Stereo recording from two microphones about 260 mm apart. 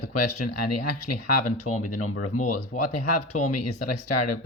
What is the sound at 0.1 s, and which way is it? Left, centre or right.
Speech, left.